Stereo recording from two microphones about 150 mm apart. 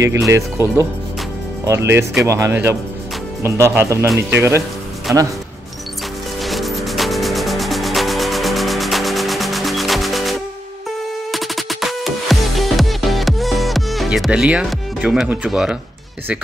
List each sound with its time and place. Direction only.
0.3 s speech: 20° right (ahead or behind)
6.4 s music: centre (ahead or behind)
11.3 s music: centre (ahead or behind)
15.0 s speech: 5° right (ahead or behind)